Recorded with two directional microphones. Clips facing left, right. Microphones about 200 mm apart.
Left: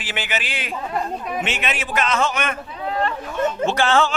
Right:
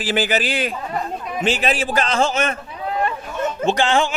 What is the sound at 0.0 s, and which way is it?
A man's voice, 35° right (ahead or behind).